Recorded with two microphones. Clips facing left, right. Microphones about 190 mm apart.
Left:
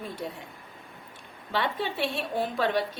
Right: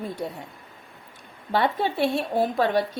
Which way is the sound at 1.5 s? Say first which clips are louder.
Right 6 dB; 45° right (ahead or behind).